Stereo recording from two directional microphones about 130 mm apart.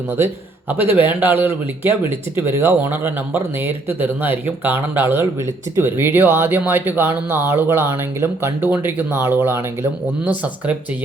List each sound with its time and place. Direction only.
0.7 s speech: 15° right (ahead or behind)